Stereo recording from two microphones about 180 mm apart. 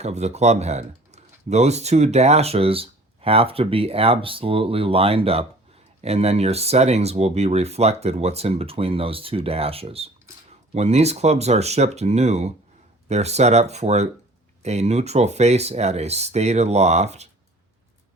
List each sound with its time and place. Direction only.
0.0 s speech: 40° right (ahead or behind)